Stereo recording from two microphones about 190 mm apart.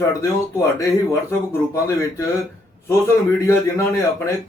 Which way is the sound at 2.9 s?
15° left (ahead or behind).